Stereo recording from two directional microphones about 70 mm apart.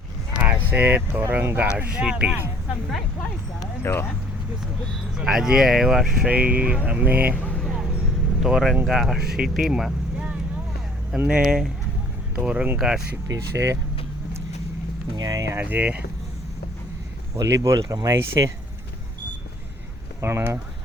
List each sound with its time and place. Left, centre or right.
0.3 s a sound: centre
0.7 s speech: right
3.9 s speech: left
5.1 s speech: centre
6.2 s speech: right
7.6 s vehicle: centre
8.4 s speech: centre
11.1 s speech: centre
12.4 s speech: right
13.2 s speech: right
15.1 s a sound: right
15.5 s speech: right
17.3 s speech: right
20.2 s speech: right